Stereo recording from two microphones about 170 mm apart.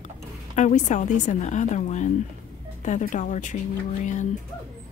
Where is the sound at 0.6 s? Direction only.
45° left (ahead or behind).